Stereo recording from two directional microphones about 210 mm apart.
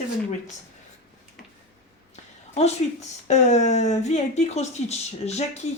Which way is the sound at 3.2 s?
35° left (ahead or behind).